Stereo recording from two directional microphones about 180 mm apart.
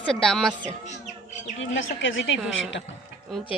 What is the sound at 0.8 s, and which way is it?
Bird, 40° left (ahead or behind).